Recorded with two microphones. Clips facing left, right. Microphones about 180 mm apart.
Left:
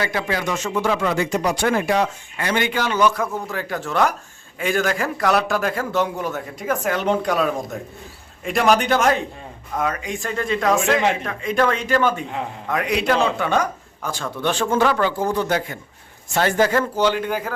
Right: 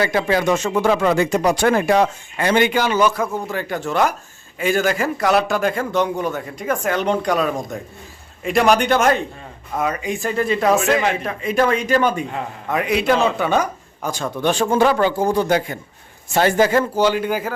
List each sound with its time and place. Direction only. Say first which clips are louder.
0.0 s speech: right 5 dB; 30° right (ahead or behind)
0.6 s speech: right 4 dB; 50° right (ahead or behind)
2.4 s speech: right 6 dB; 25° right (ahead or behind)
2.7 s a man's voice: right 2 dB; 10° right (ahead or behind)
12.6 s a man's voice: right 3 dB; 5° right (ahead or behind)
14.0 s a man's voice: right 3 dB; 15° right (ahead or behind)
14.8 s speech: right 3 dB; 25° right (ahead or behind)
15.4 s a man's voice: right 4 dB; 15° right (ahead or behind)